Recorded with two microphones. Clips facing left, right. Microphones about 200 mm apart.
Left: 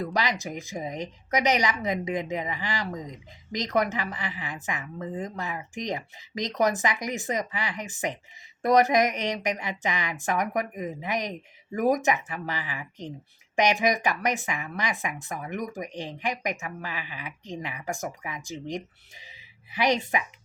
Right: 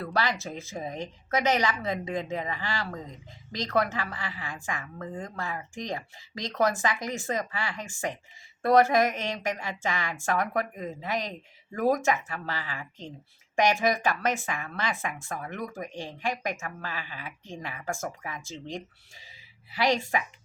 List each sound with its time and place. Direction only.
0.0 s a woman's voice: 15° left (ahead or behind)